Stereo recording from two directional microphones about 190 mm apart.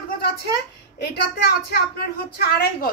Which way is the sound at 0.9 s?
55° left (ahead or behind).